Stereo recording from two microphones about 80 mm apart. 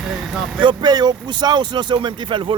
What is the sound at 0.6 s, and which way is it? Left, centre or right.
Speech, right.